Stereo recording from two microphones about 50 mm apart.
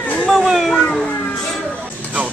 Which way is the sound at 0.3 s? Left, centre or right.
Centre.